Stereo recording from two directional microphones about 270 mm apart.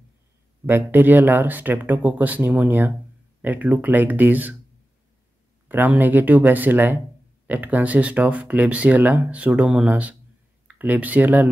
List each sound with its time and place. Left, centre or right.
0.7 s speech: centre
5.7 s speech: centre